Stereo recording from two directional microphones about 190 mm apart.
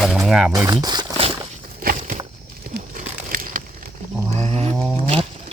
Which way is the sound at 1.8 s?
50° right (ahead or behind).